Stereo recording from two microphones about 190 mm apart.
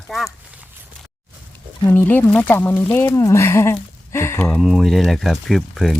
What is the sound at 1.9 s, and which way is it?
Speech, 10° left (ahead or behind).